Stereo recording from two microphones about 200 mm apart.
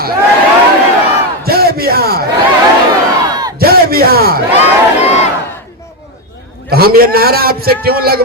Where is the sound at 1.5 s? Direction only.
50° right (ahead or behind).